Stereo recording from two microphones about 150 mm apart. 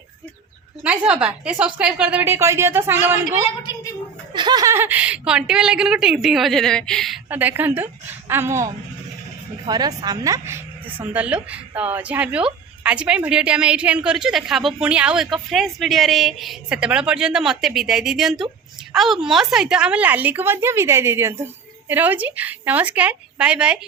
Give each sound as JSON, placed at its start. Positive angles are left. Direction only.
{"t": 0.9, "sound": "a woman's voice", "side_deg": -5}
{"t": 4.4, "sound": "a woman's voice", "side_deg": -25}
{"t": 7.3, "sound": "a woman's voice", "side_deg": -10}